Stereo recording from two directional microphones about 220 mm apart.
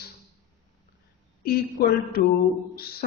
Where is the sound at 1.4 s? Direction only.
45° left (ahead or behind).